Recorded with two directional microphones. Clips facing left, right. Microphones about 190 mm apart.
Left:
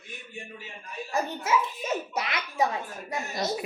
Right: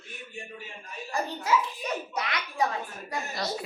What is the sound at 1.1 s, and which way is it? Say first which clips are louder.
A woman's voice: even; 25° left (ahead or behind).